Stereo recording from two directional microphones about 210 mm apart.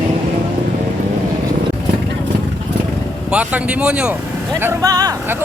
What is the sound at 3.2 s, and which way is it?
Speech, 5° right (ahead or behind).